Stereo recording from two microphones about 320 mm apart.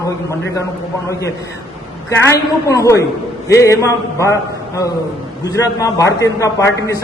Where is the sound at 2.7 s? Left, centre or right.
Centre.